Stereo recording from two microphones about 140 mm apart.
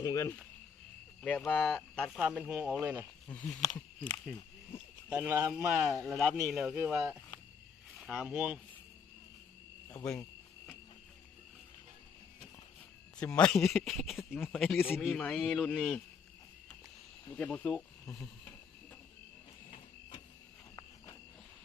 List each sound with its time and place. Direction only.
0.0 s speech: 25° left (ahead or behind)
1.2 s speech: 10° left (ahead or behind); by 3.1 s 15° right (ahead or behind)
3.3 s speech: 5° left (ahead or behind)
5.0 s speech: 10° right (ahead or behind)
6.8 s speech: 15° right (ahead or behind)
8.2 s speech: 5° right (ahead or behind)
9.9 s speech: 10° left (ahead or behind)
13.1 s speech: 5° left (ahead or behind)
17.2 s speech: 10° left (ahead or behind)